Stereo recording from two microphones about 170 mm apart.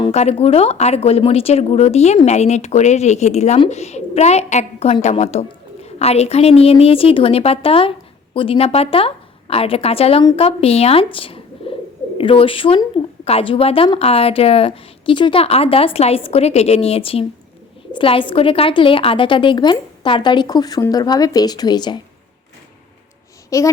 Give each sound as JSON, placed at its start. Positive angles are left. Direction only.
{"t": 0.0, "sound": "speech", "side_deg": 40}
{"t": 11.6, "sound": "bird", "side_deg": 35}
{"t": 12.1, "sound": "a woman's voice", "side_deg": 35}
{"t": 23.5, "sound": "a child's voice", "side_deg": 20}